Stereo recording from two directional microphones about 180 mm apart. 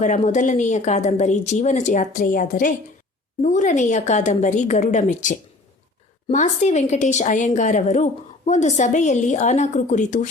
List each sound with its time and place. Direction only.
0.0 s a woman's voice: 40° left (ahead or behind)